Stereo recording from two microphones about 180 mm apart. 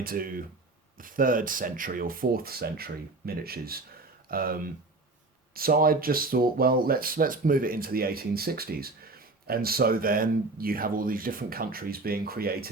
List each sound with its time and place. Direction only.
0.0 s speech: 55° right (ahead or behind)